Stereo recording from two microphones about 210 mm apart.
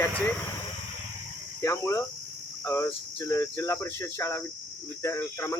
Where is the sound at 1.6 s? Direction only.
15° left (ahead or behind).